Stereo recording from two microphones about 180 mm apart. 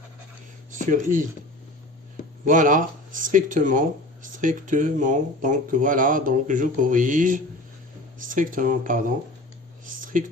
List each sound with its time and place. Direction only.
0.7 s speech: 45° right (ahead or behind)
2.5 s speech: 45° right (ahead or behind)
9.8 s a sound: 50° right (ahead or behind)